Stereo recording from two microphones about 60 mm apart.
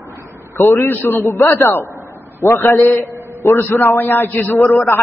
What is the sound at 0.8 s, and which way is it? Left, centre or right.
A man's voice, left.